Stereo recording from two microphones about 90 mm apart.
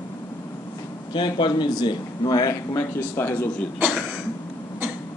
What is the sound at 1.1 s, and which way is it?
A man's voice, 60° left (ahead or behind).